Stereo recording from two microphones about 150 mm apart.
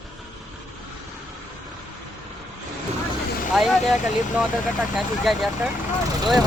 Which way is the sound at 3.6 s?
Centre (ahead or behind).